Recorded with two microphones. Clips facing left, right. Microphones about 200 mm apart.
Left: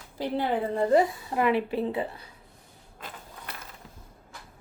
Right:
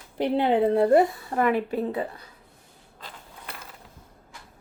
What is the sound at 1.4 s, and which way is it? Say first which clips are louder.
Speech: right 1 dB; 45° right (ahead or behind).